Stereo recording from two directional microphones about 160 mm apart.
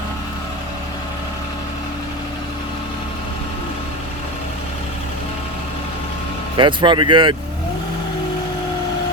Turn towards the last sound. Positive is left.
turn(degrees=-30)  # may be behind; listen again after turning